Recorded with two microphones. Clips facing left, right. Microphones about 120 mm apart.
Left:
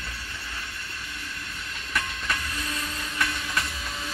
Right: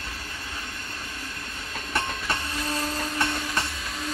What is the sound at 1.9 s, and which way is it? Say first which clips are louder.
Train: right 2 dB; 30° right (ahead or behind).